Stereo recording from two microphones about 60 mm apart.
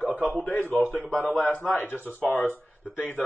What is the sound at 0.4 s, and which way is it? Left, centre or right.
A man's voice, left.